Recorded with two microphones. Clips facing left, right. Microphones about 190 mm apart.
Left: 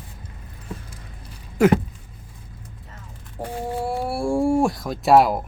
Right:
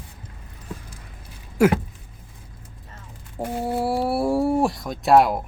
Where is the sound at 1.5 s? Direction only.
10° right (ahead or behind).